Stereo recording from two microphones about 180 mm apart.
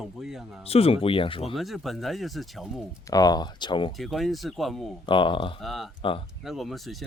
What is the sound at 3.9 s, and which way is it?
Speech, centre (ahead or behind).